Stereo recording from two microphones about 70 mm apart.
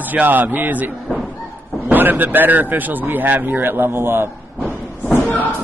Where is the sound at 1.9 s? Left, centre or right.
Right.